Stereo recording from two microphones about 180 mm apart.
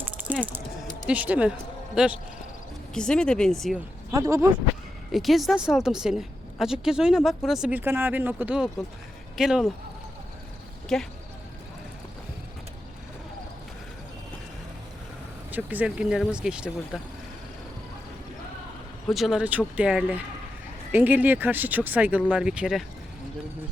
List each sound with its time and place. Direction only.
0.0 s typing: 10° right (ahead or behind)
1.0 s speech: 10° right (ahead or behind)
2.9 s a woman's voice: 5° left (ahead or behind)
4.1 s speech: 15° right (ahead or behind)
5.1 s a woman's voice: centre (ahead or behind)
10.9 s a woman's voice: centre (ahead or behind)
15.5 s a woman's voice: 10° right (ahead or behind)
19.0 s a woman's voice: centre (ahead or behind)